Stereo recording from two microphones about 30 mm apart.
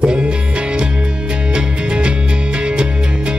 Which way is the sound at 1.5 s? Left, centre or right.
Right.